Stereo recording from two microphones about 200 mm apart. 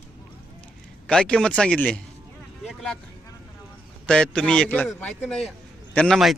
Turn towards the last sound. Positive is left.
turn(degrees=0)  # may be behind; listen again after turning